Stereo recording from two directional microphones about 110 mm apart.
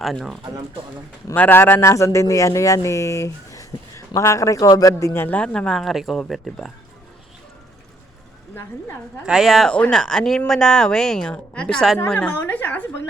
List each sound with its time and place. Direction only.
0.0 s speech: centre (ahead or behind)
1.3 s speech: 20° left (ahead or behind)
5.2 s speech: 15° left (ahead or behind)
9.2 s speech: 5° right (ahead or behind)
11.9 s a woman's voice: 20° left (ahead or behind)